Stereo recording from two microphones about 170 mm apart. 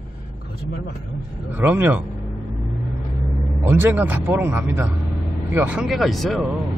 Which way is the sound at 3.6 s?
10° right (ahead or behind).